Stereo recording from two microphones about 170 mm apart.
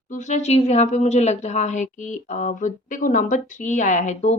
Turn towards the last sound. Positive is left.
turn(degrees=45)  # may be behind; listen again after turning